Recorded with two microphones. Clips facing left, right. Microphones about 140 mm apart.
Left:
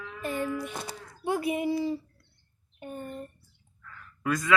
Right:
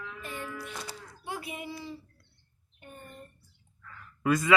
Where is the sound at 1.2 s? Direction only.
50° left (ahead or behind).